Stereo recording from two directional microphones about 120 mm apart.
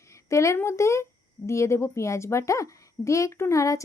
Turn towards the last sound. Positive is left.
turn(degrees=25)  # may be behind; listen again after turning